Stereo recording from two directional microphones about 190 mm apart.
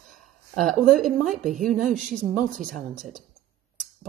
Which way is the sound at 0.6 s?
Centre (ahead or behind).